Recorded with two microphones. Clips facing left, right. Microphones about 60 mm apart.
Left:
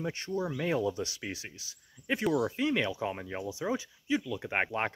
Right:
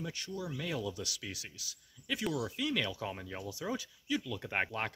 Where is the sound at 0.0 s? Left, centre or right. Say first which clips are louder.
Left 7 dB; left.